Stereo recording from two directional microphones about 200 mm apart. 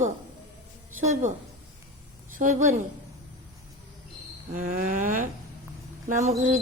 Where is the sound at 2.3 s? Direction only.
40° right (ahead or behind).